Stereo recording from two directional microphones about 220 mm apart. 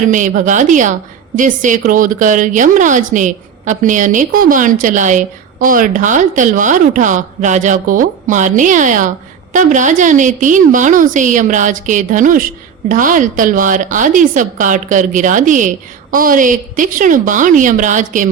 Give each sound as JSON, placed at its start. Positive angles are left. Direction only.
{"t": 0.0, "sound": "a woman's voice", "side_deg": -35}